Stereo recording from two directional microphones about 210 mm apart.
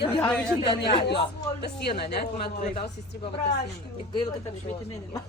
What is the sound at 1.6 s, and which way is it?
Speech, 50° left (ahead or behind).